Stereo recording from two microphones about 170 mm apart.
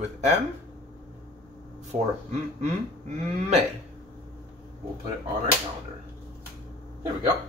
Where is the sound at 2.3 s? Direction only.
40° right (ahead or behind).